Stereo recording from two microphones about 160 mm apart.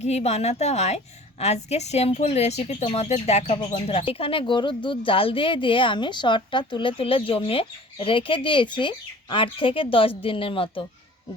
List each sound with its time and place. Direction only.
0.0 s a woman's voice: 45° left (ahead or behind)